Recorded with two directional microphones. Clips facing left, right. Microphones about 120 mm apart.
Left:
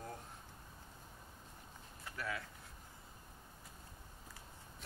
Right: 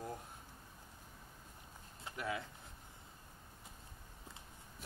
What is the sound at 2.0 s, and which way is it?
Speech, 20° right (ahead or behind).